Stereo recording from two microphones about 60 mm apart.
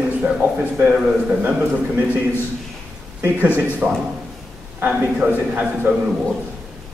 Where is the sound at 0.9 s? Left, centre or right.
Centre.